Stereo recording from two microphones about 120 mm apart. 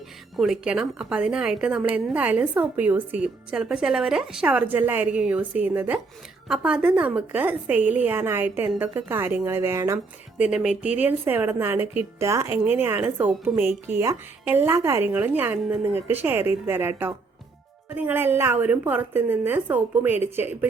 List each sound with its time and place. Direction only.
0.3 s a woman's voice: centre (ahead or behind); by 10.0 s 20° right (ahead or behind)
10.3 s a woman's voice: 10° right (ahead or behind)